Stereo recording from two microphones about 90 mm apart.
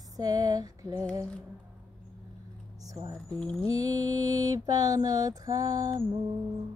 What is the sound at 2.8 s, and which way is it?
Music, 40° right (ahead or behind).